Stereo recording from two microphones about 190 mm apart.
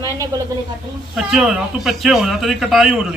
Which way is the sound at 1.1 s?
Centre (ahead or behind).